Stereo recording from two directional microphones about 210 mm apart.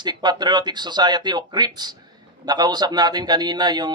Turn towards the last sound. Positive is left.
turn(degrees=-20)  # may be behind; listen again after turning